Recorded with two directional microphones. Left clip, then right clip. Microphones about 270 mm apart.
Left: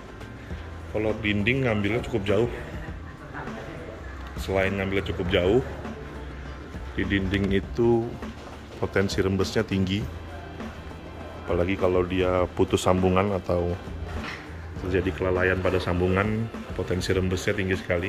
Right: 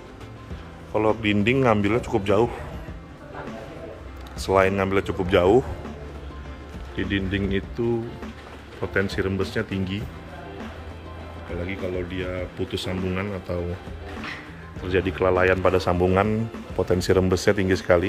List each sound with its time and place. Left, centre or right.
0.9 s speech: centre
4.5 s speech: centre
7.0 s speech: centre
8.8 s speech: centre
11.6 s speech: centre
14.9 s speech: centre